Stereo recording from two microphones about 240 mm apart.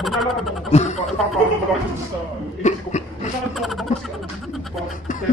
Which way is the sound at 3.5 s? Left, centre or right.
Centre.